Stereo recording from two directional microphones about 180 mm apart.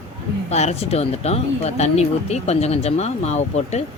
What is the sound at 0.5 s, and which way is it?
Speech, 35° left (ahead or behind).